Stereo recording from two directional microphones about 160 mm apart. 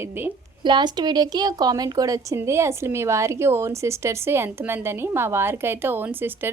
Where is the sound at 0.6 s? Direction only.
30° right (ahead or behind).